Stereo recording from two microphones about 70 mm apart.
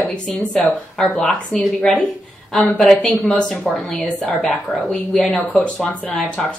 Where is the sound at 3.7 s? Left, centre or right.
Centre.